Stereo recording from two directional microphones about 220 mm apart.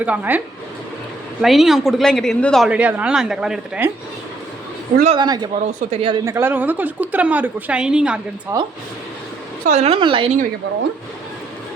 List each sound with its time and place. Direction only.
0.0 s a woman's voice: 5° right (ahead or behind)
5.1 s a woman's voice: 20° right (ahead or behind)
6.2 s a woman's voice: 10° right (ahead or behind)
9.6 s a woman's voice: 30° right (ahead or behind)